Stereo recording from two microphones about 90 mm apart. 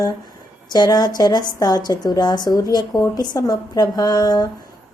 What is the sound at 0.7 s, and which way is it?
Speech, 45° left (ahead or behind).